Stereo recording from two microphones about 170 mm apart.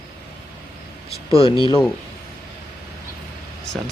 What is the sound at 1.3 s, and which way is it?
Speech, 35° left (ahead or behind).